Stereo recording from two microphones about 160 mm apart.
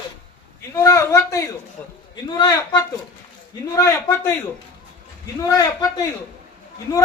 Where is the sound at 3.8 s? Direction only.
20° left (ahead or behind).